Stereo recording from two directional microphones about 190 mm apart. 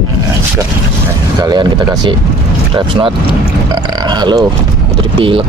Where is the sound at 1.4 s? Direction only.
25° right (ahead or behind).